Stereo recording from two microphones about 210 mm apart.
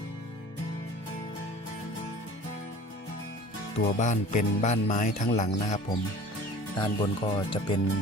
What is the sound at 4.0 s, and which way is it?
Speech, 35° left (ahead or behind).